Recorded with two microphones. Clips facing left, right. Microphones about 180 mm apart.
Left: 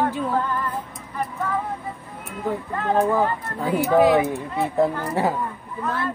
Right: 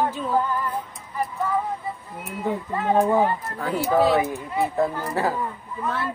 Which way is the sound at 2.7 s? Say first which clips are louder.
Right 1 dB; 10° right (ahead or behind).